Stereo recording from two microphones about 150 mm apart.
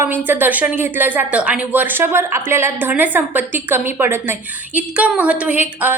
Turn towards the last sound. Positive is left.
turn(degrees=-15)  # may be behind; listen again after turning